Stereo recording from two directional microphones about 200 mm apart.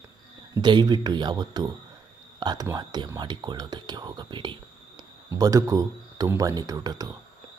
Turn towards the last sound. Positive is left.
turn(degrees=-20)  # may be behind; listen again after turning